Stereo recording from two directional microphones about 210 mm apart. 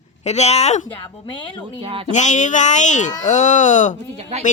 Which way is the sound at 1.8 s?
25° right (ahead or behind).